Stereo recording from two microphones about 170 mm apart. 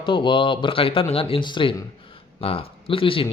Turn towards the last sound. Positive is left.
turn(degrees=30)  # may be behind; listen again after turning